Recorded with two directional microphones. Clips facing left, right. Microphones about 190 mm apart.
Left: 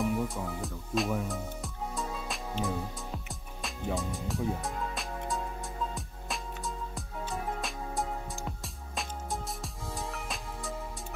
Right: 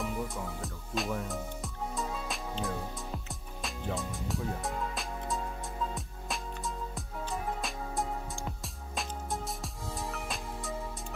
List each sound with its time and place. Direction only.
0.0 s music: centre (ahead or behind)